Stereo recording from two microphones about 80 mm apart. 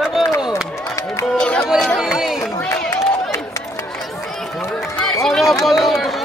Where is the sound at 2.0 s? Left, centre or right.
Centre.